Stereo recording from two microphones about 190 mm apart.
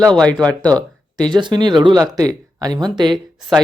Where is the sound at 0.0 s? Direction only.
5° left (ahead or behind).